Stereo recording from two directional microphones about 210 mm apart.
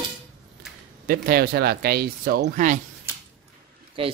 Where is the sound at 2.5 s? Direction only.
35° right (ahead or behind).